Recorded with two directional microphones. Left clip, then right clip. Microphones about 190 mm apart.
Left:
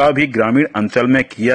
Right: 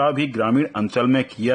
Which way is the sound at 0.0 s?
15° left (ahead or behind).